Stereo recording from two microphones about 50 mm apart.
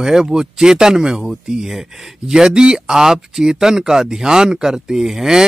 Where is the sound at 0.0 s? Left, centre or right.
Centre.